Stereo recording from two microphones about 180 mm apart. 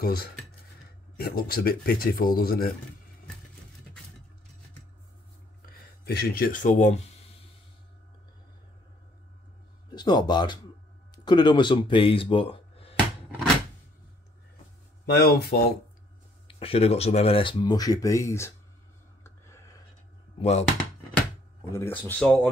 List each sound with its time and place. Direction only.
0.0 s speech: 60° left (ahead or behind)
6.0 s speech: 60° left (ahead or behind); by 7.0 s 40° left (ahead or behind)
9.8 s speech: 25° left (ahead or behind)
15.1 s speech: 60° left (ahead or behind)
16.4 s speech: 30° left (ahead or behind); by 18.5 s 15° left (ahead or behind)
19.2 s whispering: 15° left (ahead or behind)
20.3 s speech: 35° left (ahead or behind)
21.7 s speech: 10° left (ahead or behind)